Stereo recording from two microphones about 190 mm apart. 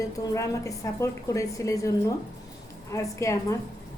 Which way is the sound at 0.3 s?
15° left (ahead or behind).